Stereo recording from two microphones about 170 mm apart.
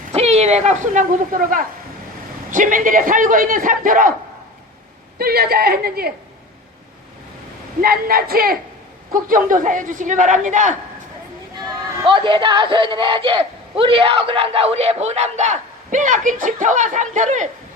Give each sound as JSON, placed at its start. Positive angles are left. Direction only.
{"t": 0.1, "sound": "a man's voice", "side_deg": -40}
{"t": 5.1, "sound": "a woman's voice", "side_deg": -65}
{"t": 7.8, "sound": "a woman's voice", "side_deg": -60}
{"t": 11.6, "sound": "speech", "side_deg": -30}